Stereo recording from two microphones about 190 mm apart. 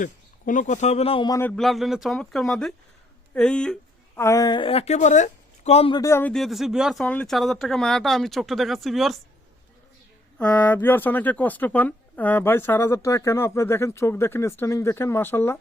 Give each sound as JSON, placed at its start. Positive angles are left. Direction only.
{"t": 0.0, "sound": "speech", "side_deg": 40}
{"t": 1.4, "sound": "a woman's voice", "side_deg": 5}
{"t": 6.0, "sound": "speech", "side_deg": 15}
{"t": 10.3, "sound": "speech", "side_deg": 5}